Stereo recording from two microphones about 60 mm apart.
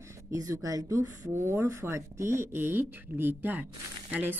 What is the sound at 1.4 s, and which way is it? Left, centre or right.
Speech, right.